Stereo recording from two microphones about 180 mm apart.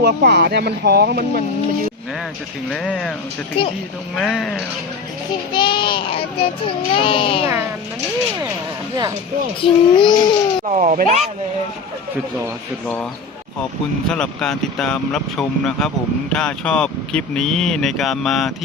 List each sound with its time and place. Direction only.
0.0 s speech: 65° right (ahead or behind)
2.6 s speech: 5° left (ahead or behind)
3.6 s speech: 30° left (ahead or behind)
4.1 s speech: centre (ahead or behind)
5.5 s speech: 25° left (ahead or behind)
9.6 s speech: 25° left (ahead or behind)
10.7 s speech: 40° right (ahead or behind)
14.1 s speech: 5° left (ahead or behind)